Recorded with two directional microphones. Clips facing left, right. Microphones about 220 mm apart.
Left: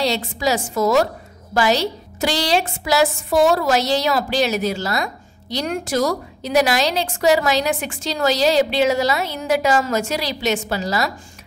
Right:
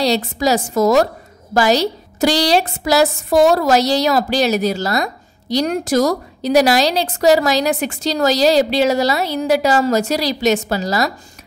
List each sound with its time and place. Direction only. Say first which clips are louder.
0.0 s a woman's voice: right 4 dB; 40° right (ahead or behind)